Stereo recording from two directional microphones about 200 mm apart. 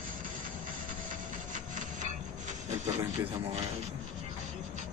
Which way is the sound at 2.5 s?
35° right (ahead or behind).